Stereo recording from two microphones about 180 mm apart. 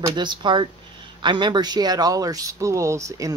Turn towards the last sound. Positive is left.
turn(degrees=-20)  # may be behind; listen again after turning